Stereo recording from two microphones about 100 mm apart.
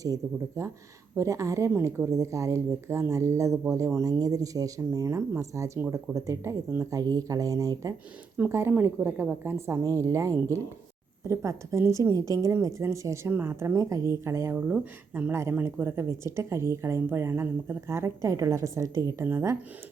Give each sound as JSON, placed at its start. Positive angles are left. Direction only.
{"t": 0.0, "sound": "speech", "side_deg": -35}
{"t": 8.4, "sound": "speech", "side_deg": -25}
{"t": 14.7, "sound": "speech", "side_deg": -15}
{"t": 15.3, "sound": "speech", "side_deg": -25}